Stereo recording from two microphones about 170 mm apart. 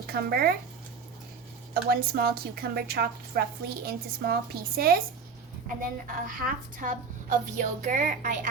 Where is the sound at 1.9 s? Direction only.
65° right (ahead or behind).